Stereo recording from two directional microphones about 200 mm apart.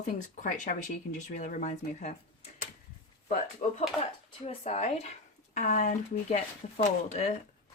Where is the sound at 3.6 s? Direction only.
40° left (ahead or behind).